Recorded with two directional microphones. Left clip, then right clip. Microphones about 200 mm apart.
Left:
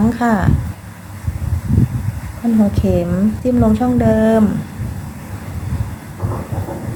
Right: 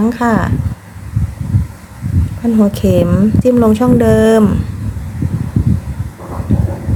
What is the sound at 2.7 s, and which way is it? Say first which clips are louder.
A woman's voice: right 5 dB; 30° right (ahead or behind).